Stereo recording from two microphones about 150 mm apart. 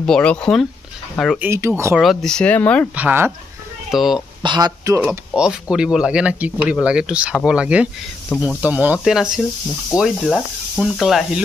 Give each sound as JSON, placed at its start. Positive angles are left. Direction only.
{"t": 0.0, "sound": "speech", "side_deg": 5}
{"t": 1.4, "sound": "speech", "side_deg": -15}
{"t": 2.0, "sound": "speech", "side_deg": 5}
{"t": 2.9, "sound": "speech", "side_deg": -10}
{"t": 4.4, "sound": "speech", "side_deg": -30}
{"t": 5.0, "sound": "speech", "side_deg": -10}